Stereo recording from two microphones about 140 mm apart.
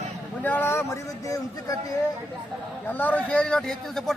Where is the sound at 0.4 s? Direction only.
15° left (ahead or behind).